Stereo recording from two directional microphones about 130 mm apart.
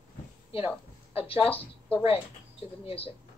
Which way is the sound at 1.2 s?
45° left (ahead or behind).